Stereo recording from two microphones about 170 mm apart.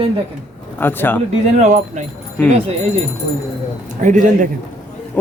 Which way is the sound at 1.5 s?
45° right (ahead or behind).